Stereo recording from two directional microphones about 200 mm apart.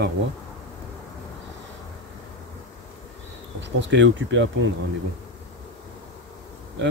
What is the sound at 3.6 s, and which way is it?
Bee, 65° right (ahead or behind).